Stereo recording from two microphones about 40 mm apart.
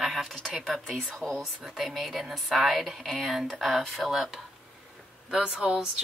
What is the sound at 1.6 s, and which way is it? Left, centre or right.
Speech, centre.